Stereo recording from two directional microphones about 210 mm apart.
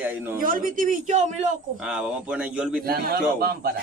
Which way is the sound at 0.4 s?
40° right (ahead or behind).